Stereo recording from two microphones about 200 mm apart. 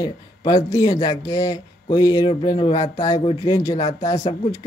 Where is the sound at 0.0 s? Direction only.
20° left (ahead or behind).